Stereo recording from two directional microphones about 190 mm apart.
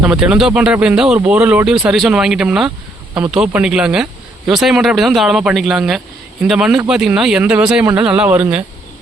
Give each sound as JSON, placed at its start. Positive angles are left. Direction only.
{"t": 0.0, "sound": "speech", "side_deg": -5}